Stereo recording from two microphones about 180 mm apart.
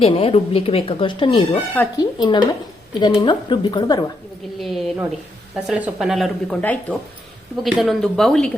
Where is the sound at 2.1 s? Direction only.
25° left (ahead or behind).